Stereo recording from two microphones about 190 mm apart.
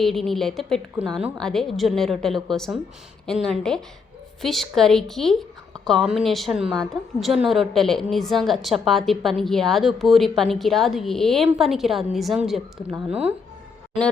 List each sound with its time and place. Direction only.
0.0 s a woman's voice: centre (ahead or behind)